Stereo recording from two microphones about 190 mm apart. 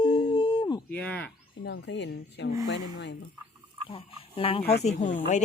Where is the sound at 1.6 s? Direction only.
65° left (ahead or behind).